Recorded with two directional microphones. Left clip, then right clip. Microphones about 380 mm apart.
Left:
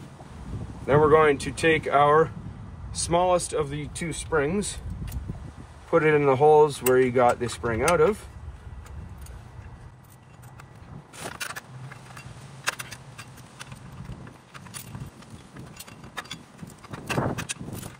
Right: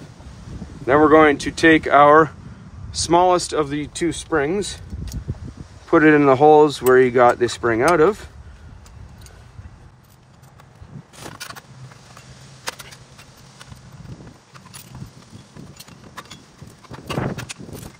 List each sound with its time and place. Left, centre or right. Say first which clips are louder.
0.8 s speech: right 6 dB; right
5.9 s speech: right 7 dB; right